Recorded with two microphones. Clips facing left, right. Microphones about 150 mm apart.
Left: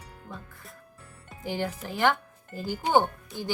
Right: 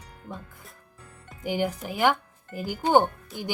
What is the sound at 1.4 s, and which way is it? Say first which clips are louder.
Speech: right 4 dB; 15° right (ahead or behind).